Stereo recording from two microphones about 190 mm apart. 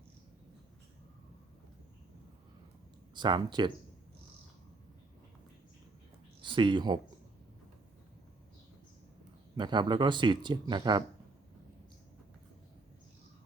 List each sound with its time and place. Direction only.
3.2 s speech: 25° right (ahead or behind)
6.4 s speech: 25° right (ahead or behind)
9.6 s speech: 25° right (ahead or behind)